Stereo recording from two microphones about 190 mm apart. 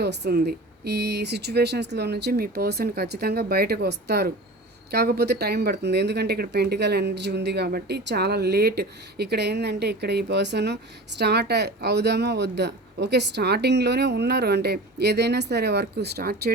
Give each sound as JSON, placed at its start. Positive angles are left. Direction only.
{"t": 0.0, "sound": "speech", "side_deg": -60}